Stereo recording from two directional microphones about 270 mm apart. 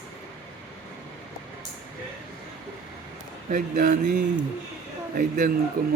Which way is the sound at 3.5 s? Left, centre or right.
Right.